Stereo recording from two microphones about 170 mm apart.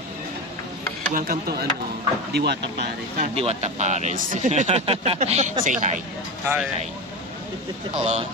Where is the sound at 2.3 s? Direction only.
75° right (ahead or behind).